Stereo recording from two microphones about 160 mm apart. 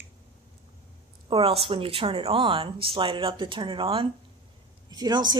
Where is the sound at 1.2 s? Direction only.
35° right (ahead or behind).